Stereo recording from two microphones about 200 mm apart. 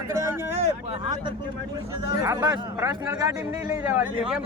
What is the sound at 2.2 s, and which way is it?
Speech, 15° right (ahead or behind).